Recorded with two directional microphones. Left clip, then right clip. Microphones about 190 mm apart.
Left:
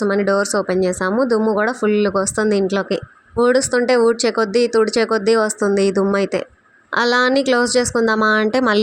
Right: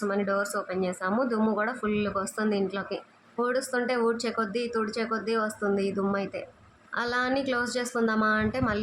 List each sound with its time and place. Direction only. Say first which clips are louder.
0.0 s speech: left 11 dB; 35° left (ahead or behind)